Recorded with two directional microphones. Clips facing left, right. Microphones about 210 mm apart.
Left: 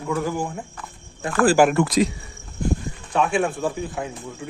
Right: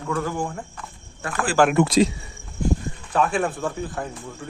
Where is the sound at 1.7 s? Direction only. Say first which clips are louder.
Right 2 dB; 25° right (ahead or behind).